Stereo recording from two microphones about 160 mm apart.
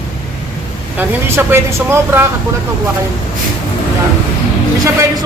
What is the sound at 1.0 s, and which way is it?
Speech, 15° right (ahead or behind).